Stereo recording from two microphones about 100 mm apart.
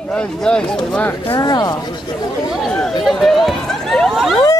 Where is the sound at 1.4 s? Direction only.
40° left (ahead or behind).